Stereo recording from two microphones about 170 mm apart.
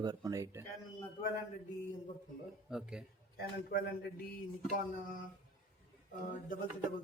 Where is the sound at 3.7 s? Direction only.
60° left (ahead or behind).